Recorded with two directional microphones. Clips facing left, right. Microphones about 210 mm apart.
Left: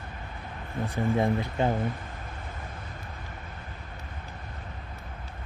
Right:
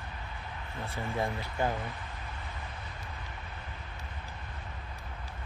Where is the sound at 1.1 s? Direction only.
20° left (ahead or behind).